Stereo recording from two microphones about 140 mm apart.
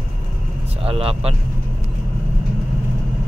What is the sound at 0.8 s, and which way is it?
Speech, 45° right (ahead or behind).